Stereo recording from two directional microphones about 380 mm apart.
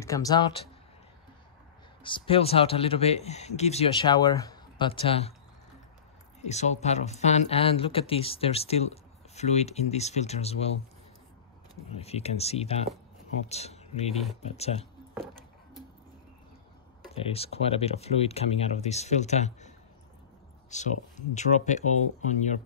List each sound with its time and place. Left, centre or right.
0.0 s speech: centre
2.0 s speech: centre
6.4 s speech: centre
12.0 s speech: centre
17.1 s speech: centre
20.7 s speech: centre